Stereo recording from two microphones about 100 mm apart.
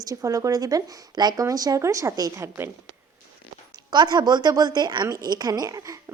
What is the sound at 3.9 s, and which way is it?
A woman's voice, 45° right (ahead or behind).